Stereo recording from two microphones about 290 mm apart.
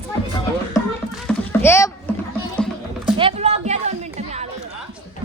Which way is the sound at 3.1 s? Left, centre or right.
Centre.